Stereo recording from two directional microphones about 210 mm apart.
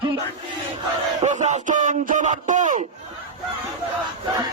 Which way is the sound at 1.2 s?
35° right (ahead or behind).